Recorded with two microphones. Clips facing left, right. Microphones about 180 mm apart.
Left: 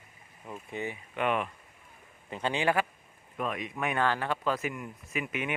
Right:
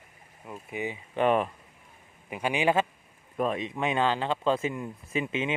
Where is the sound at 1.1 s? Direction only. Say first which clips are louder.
Right 6 dB; 35° right (ahead or behind).